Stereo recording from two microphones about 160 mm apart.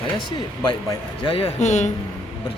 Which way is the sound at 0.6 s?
30° left (ahead or behind).